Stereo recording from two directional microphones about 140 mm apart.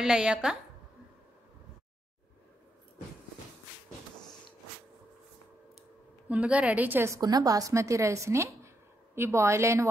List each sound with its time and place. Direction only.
0.0 s a woman's voice: 5° right (ahead or behind)
6.2 s a woman's voice: 10° right (ahead or behind)
7.2 s a woman's voice: 30° right (ahead or behind)